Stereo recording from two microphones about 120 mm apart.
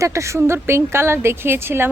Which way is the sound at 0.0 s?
25° right (ahead or behind).